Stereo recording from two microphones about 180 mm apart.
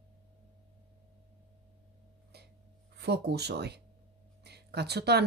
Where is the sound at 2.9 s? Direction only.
65° right (ahead or behind).